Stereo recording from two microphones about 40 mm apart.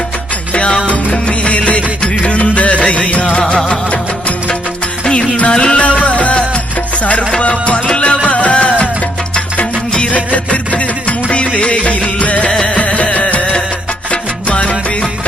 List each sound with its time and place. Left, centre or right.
0.5 s music: left
5.0 s music: centre; by 9.0 s left
10.1 s music: left